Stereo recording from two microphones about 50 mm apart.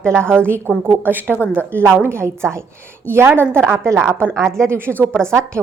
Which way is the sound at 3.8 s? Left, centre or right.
Right.